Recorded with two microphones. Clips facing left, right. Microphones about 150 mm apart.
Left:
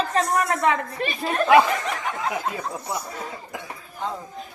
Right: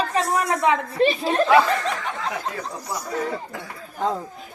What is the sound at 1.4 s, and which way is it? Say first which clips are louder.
Speech: left 1 dB; 15° left (ahead or behind).